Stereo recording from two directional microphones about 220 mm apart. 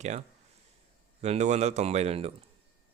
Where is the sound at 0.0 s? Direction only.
30° right (ahead or behind).